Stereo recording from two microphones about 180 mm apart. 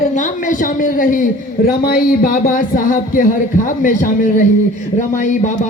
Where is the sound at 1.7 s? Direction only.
55° left (ahead or behind).